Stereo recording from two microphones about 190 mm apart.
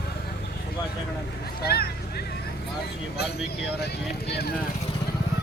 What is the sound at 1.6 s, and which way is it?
Speech, 55° left (ahead or behind).